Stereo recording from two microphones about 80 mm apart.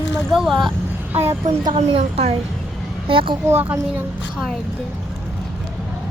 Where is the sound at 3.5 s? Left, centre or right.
Right.